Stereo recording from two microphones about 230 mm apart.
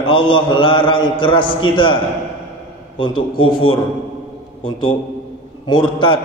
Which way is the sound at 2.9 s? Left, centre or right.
Left.